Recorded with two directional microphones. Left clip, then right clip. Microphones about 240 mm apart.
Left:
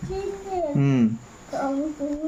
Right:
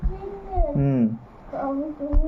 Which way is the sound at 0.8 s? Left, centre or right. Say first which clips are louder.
Even; left.